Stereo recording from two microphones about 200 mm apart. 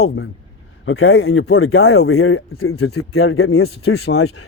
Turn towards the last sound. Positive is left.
turn(degrees=90)